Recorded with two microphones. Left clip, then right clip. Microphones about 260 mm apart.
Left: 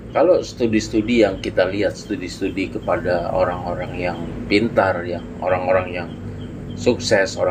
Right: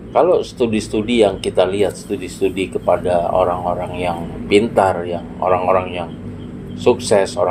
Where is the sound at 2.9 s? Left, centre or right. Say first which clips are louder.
Right 5 dB; right.